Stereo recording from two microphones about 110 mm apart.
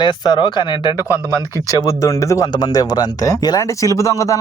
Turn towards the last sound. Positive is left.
turn(degrees=30)  # may be behind; listen again after turning